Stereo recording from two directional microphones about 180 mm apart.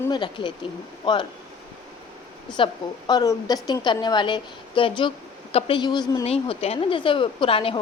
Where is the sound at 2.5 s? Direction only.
25° left (ahead or behind).